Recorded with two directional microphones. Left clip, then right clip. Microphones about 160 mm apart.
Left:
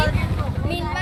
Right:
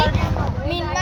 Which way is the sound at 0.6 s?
25° right (ahead or behind).